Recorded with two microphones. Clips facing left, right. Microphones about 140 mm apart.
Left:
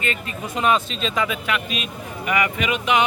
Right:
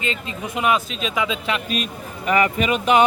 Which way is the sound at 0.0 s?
20° right (ahead or behind).